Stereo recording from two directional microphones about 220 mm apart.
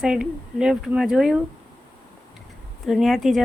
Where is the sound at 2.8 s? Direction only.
Centre (ahead or behind).